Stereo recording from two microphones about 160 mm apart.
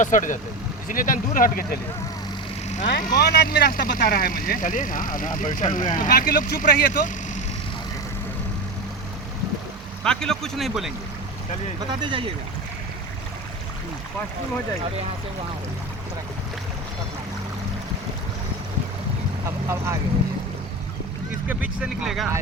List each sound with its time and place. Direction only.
0.0 s speech: 50° left (ahead or behind)
2.6 s vehicle: 50° left (ahead or behind)
3.2 s speech: 75° left (ahead or behind)
10.0 s speech: 5° left (ahead or behind)
11.9 s speech: 30° right (ahead or behind)
19.5 s boat: 15° right (ahead or behind)
21.4 s speech: 10° right (ahead or behind)